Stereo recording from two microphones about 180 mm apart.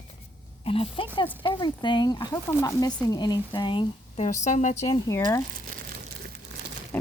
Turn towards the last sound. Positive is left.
turn(degrees=10)  # may be behind; listen again after turning